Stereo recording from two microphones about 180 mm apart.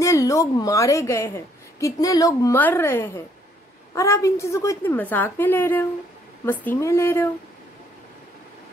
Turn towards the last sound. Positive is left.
turn(degrees=15)  # may be behind; listen again after turning